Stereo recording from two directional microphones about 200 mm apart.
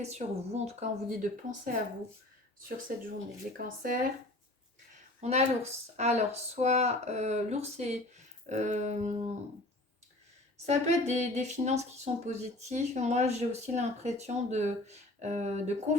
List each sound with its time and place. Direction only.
0.0 s speech: 35° right (ahead or behind)
3.6 s speech: 45° right (ahead or behind)
5.2 s speech: 35° right (ahead or behind)
10.7 s speech: 35° right (ahead or behind)